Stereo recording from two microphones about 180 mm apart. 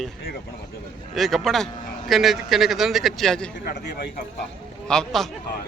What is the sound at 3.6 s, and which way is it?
Speech, 65° left (ahead or behind).